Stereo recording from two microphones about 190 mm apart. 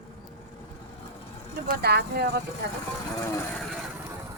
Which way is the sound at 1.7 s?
55° right (ahead or behind).